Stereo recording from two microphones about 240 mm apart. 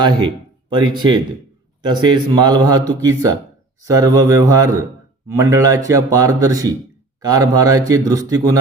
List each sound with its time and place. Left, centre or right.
0.7 s speech: centre